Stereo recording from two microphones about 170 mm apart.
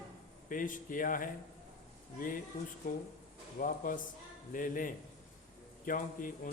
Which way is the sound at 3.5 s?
50° left (ahead or behind).